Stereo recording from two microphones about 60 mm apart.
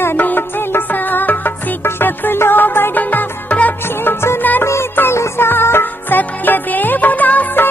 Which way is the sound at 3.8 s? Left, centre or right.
Left.